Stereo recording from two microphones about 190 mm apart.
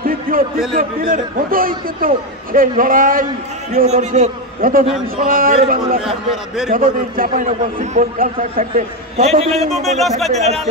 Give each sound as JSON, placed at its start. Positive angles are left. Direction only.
{"t": 0.0, "sound": "a sound", "side_deg": -50}
{"t": 0.7, "sound": "a man's voice", "side_deg": -50}
{"t": 6.0, "sound": "a man's voice", "side_deg": -5}
{"t": 6.7, "sound": "a man's voice", "side_deg": -45}
{"t": 9.7, "sound": "a man's voice", "side_deg": 0}
{"t": 10.3, "sound": "a man's voice", "side_deg": -35}